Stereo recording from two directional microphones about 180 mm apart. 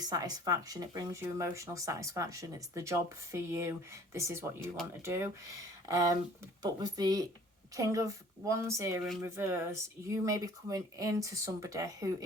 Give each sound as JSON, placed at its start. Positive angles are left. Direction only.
{"t": 0.0, "sound": "speech", "side_deg": -20}